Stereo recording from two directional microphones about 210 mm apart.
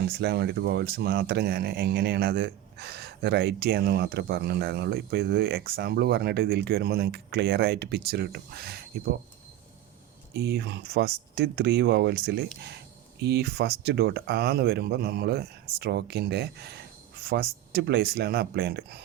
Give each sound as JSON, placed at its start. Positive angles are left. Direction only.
{"t": 0.0, "sound": "speech", "side_deg": -50}
{"t": 10.3, "sound": "speech", "side_deg": -50}